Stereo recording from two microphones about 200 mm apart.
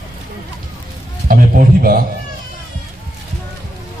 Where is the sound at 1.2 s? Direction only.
45° right (ahead or behind).